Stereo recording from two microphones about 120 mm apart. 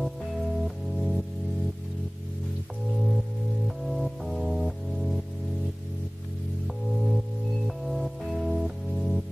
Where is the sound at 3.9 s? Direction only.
Centre (ahead or behind).